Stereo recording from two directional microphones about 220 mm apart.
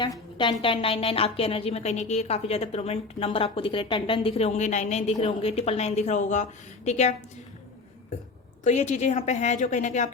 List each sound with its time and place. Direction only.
0.0 s a woman's voice: 20° left (ahead or behind)
8.6 s a woman's voice: 30° left (ahead or behind)